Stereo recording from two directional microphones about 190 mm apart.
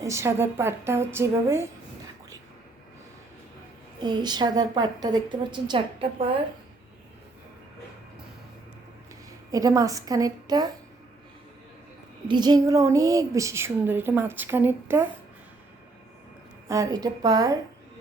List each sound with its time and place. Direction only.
0.0 s speech: 15° right (ahead or behind)
4.0 s a woman's voice: 20° right (ahead or behind)
9.5 s speech: 20° right (ahead or behind)
12.3 s speech: 20° right (ahead or behind)
16.6 s a woman's voice: 15° right (ahead or behind)